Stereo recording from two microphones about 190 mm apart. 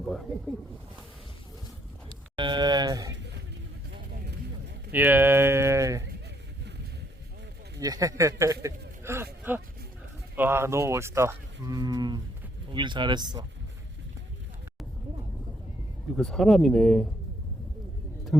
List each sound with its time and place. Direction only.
0.0 s speech: centre (ahead or behind)
2.3 s speech: 25° right (ahead or behind)
4.1 s vehicle: 60° right (ahead or behind)
4.9 s speech: 10° right (ahead or behind)
7.8 s speech: 20° right (ahead or behind)
9.0 s a sound: 15° right (ahead or behind)
10.3 s speech: 10° right (ahead or behind)
16.1 s speech: centre (ahead or behind)